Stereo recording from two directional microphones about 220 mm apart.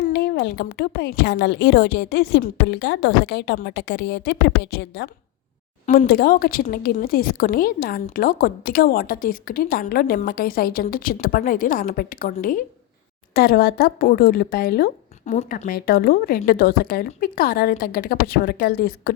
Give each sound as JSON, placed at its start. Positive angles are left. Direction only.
{"t": 0.0, "sound": "a woman's voice", "side_deg": 45}
{"t": 5.8, "sound": "a woman's voice", "side_deg": 35}